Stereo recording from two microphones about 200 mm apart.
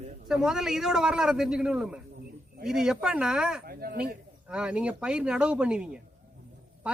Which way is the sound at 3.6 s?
50° right (ahead or behind).